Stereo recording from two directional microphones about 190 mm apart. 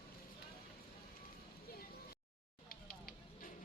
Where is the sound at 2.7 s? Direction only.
50° left (ahead or behind).